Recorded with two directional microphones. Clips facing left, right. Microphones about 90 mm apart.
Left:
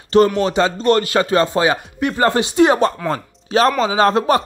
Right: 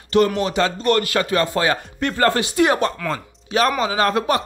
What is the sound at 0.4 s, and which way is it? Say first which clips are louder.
Speech: left 3 dB; 25° left (ahead or behind).